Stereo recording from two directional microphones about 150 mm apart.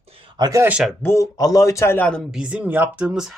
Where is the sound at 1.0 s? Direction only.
20° left (ahead or behind).